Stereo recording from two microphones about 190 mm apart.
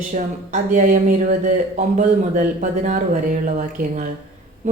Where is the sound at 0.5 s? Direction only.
40° right (ahead or behind).